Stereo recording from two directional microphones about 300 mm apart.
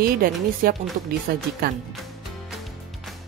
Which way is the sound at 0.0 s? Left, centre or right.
Right.